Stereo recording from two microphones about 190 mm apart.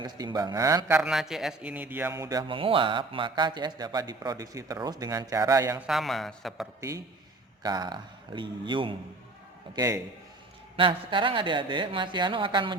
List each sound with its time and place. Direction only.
0.0 s a man's voice: 20° right (ahead or behind)
0.9 s a man's voice: 5° right (ahead or behind)
5.8 s a man's voice: centre (ahead or behind)
7.6 s a man's voice: 20° right (ahead or behind)